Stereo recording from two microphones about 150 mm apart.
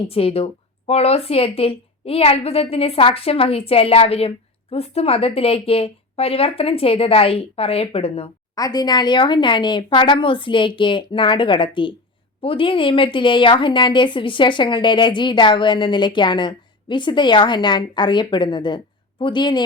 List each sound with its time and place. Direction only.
0.1 s a woman's voice: 40° left (ahead or behind)
8.5 s a woman's voice: 25° left (ahead or behind)